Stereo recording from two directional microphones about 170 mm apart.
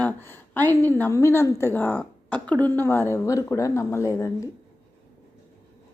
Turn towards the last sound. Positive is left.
turn(degrees=15)  # may be behind; listen again after turning